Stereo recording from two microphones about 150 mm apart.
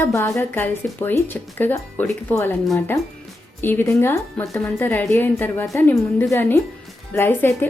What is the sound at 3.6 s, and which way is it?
Speech, 15° left (ahead or behind).